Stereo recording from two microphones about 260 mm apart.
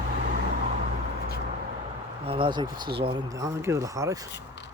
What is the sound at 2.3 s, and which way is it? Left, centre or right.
Speech, centre.